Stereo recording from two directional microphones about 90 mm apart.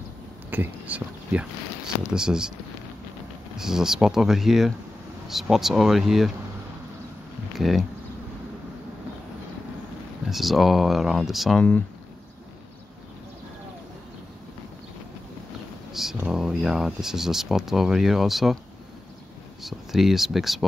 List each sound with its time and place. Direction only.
0.5 s speech: 20° right (ahead or behind)
3.5 s speech: 5° right (ahead or behind)
7.5 s speech: centre (ahead or behind)
10.2 s speech: centre (ahead or behind)
15.9 s a sound: 5° right (ahead or behind)
16.3 s speech: 5° right (ahead or behind)
19.6 s speech: 5° right (ahead or behind)